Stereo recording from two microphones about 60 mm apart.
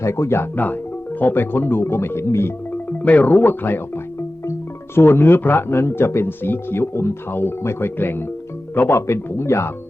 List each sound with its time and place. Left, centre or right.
0.0 s speech: left
0.5 s speech: left
3.0 s speech: left